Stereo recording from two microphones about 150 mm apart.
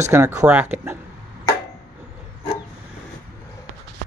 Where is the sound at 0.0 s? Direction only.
20° right (ahead or behind).